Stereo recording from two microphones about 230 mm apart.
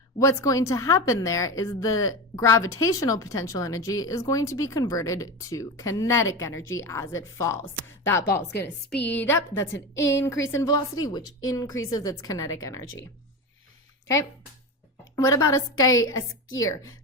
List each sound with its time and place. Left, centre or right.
0.2 s a woman's voice: centre
15.1 s a woman's voice: centre